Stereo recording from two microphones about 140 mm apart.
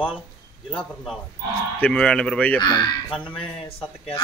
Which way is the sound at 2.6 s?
30° left (ahead or behind).